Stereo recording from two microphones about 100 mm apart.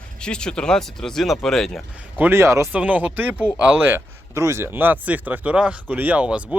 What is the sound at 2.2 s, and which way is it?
Speech, 25° right (ahead or behind).